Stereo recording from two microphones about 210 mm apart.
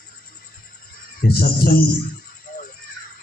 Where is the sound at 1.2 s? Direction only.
45° left (ahead or behind).